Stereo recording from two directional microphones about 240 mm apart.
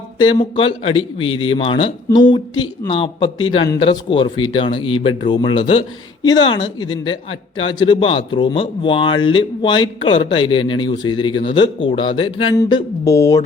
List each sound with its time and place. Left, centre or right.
0.2 s speech: centre